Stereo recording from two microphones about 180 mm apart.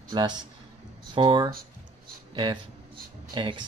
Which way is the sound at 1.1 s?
25° right (ahead or behind).